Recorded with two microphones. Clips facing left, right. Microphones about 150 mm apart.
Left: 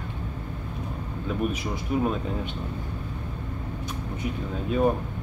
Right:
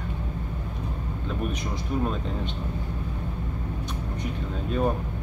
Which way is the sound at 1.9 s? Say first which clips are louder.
Left 2 dB; 5° left (ahead or behind).